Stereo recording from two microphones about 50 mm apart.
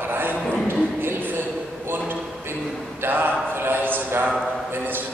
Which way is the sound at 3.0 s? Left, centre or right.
Right.